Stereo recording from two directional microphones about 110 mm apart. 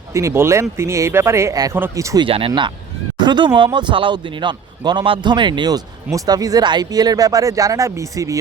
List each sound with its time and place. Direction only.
0.1 s speech: 25° right (ahead or behind)
2.1 s speech: 55° right (ahead or behind); by 8.4 s 30° right (ahead or behind)